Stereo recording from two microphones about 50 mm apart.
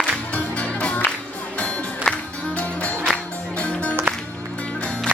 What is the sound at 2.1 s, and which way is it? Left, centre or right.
Music, centre.